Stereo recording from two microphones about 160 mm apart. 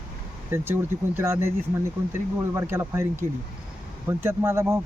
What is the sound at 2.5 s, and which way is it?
Speech, 15° right (ahead or behind).